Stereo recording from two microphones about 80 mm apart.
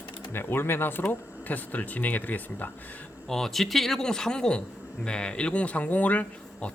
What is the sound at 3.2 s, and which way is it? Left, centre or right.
Speech, centre.